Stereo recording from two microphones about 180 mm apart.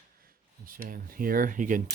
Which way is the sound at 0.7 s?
50° right (ahead or behind).